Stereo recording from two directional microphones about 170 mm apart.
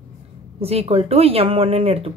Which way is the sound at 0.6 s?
35° right (ahead or behind).